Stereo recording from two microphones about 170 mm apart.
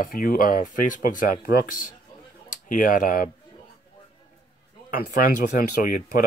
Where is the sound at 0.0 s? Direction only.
55° left (ahead or behind).